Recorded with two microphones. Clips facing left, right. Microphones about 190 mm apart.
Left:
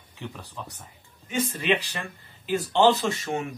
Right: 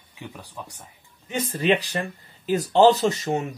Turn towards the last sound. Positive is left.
turn(degrees=-40)  # may be behind; listen again after turning